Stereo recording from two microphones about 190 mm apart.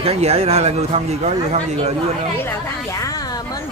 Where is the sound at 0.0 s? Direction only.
35° right (ahead or behind).